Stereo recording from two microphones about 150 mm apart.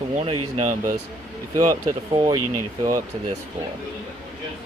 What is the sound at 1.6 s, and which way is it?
Speech, 25° right (ahead or behind).